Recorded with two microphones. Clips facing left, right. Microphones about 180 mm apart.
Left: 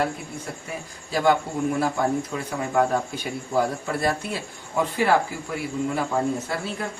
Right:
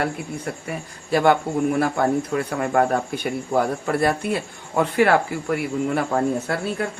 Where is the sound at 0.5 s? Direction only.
65° right (ahead or behind).